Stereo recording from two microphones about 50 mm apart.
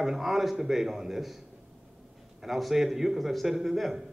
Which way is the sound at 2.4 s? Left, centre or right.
Centre.